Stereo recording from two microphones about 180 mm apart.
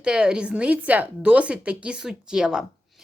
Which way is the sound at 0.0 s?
5° right (ahead or behind).